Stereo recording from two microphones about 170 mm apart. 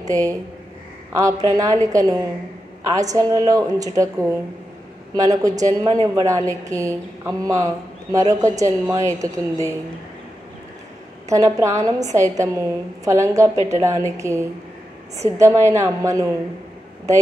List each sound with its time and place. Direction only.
0.1 s speech: 20° right (ahead or behind)
11.2 s a woman's voice: 20° right (ahead or behind)